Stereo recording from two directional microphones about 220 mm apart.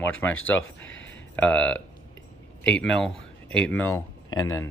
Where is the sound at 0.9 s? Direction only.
60° left (ahead or behind).